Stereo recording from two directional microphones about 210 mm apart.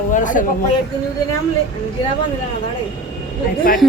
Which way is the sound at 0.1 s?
40° left (ahead or behind).